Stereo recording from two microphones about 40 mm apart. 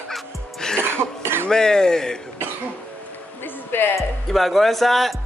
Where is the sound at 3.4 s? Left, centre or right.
Left.